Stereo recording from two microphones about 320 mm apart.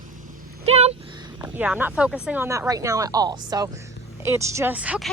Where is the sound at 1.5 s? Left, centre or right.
Centre.